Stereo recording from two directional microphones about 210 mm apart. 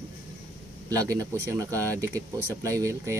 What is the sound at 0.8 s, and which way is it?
Speech, 15° right (ahead or behind).